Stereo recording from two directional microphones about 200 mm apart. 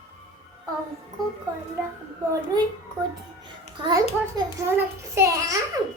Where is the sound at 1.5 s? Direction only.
15° right (ahead or behind).